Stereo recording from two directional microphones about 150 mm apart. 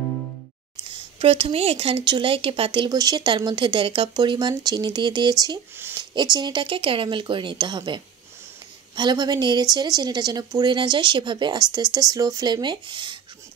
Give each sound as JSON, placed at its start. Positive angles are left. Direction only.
{"t": 0.9, "sound": "speech", "side_deg": -40}